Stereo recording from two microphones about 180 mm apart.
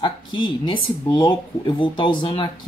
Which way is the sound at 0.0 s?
25° left (ahead or behind).